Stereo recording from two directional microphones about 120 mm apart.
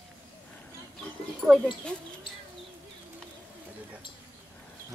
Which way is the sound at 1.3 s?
Centre (ahead or behind).